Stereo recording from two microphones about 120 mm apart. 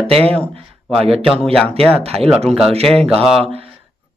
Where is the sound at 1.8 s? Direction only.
55° right (ahead or behind).